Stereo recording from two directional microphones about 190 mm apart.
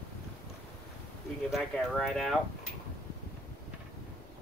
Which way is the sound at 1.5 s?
Centre (ahead or behind).